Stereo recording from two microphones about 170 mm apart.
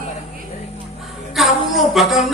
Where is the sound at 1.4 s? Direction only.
Centre (ahead or behind).